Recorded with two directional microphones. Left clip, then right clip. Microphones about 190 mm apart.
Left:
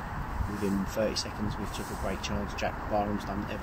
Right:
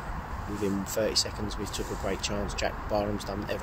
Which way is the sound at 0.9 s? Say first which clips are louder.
Right 4 dB; 60° right (ahead or behind).